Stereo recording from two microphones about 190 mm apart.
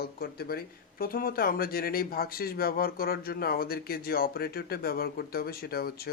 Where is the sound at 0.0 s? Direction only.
55° left (ahead or behind).